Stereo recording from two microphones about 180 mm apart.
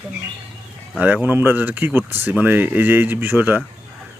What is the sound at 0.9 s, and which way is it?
Speech, 10° right (ahead or behind).